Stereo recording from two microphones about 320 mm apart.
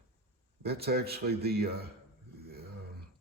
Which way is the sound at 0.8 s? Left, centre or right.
Right.